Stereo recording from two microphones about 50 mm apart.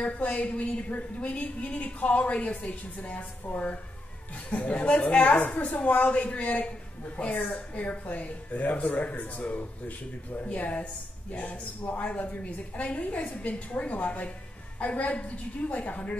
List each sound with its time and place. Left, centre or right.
0.0 s a woman's voice: left
4.5 s a woman's voice: left